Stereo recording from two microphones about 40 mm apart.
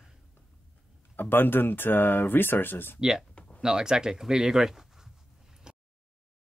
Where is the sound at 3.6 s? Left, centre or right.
Centre.